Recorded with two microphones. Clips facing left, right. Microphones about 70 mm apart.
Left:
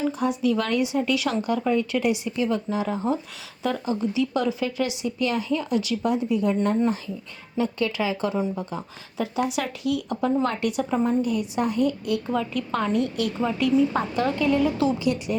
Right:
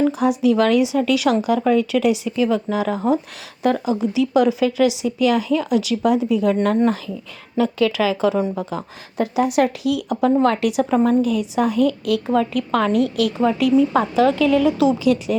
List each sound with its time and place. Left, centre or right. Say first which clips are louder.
0.1 s speech: right 6 dB; right
12.3 s a woman's voice: right 7 dB; right